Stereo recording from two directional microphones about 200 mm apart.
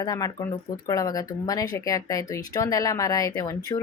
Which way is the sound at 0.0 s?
20° left (ahead or behind).